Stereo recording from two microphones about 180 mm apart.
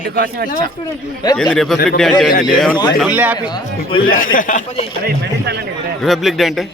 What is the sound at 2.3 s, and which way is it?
Speech, 55° left (ahead or behind).